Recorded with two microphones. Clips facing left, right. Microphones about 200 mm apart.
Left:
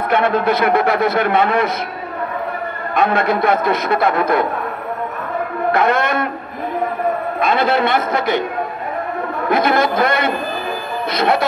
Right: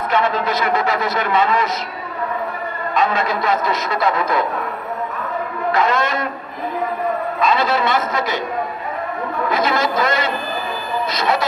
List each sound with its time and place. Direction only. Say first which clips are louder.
0.1 s a man's voice: left 4 dB; 55° left (ahead or behind)
2.9 s a man's voice: left 3 dB; 55° left (ahead or behind)
5.7 s a man's voice: left 2 dB; 55° left (ahead or behind)
7.3 s a man's voice: left 2 dB; 55° left (ahead or behind)
9.5 s a man's voice: left 5 dB; 55° left (ahead or behind)